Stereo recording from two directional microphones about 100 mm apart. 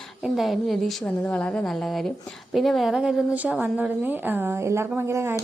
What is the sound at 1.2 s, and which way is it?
Speech, 15° left (ahead or behind).